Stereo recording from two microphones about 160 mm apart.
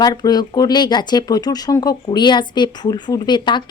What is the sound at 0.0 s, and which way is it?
A woman's voice, 25° left (ahead or behind).